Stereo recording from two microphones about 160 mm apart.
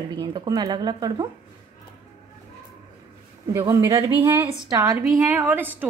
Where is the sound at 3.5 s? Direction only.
20° right (ahead or behind).